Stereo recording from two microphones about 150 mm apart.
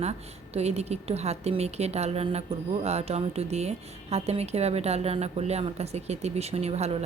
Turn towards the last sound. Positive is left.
turn(degrees=-45)  # may be behind; listen again after turning